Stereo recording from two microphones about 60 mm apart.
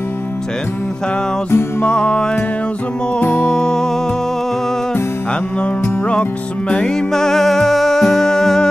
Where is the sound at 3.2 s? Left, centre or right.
Left.